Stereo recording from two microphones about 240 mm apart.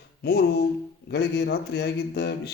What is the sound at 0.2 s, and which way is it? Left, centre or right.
A man's voice, left.